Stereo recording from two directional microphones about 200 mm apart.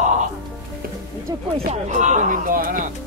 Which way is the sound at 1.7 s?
35° right (ahead or behind).